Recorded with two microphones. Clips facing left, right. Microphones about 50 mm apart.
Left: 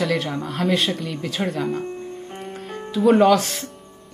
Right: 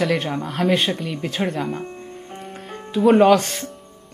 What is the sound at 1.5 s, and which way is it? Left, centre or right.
Speech, centre.